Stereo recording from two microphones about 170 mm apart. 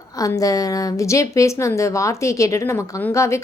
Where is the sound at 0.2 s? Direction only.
20° left (ahead or behind).